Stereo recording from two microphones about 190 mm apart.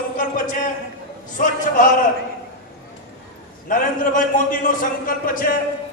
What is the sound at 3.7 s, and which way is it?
A man's voice, 45° left (ahead or behind).